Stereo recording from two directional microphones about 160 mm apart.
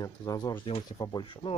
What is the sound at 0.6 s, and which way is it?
Speech, 35° left (ahead or behind).